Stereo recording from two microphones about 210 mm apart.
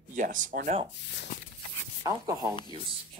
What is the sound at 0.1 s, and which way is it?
Speech, 40° right (ahead or behind).